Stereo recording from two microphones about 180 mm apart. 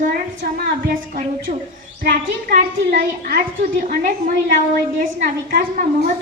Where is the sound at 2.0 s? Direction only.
50° right (ahead or behind).